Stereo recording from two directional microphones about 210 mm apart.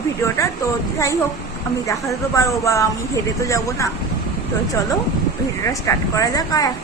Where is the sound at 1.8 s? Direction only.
15° left (ahead or behind).